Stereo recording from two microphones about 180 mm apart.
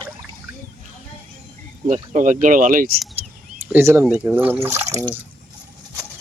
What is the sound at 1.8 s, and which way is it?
Speech, 45° right (ahead or behind).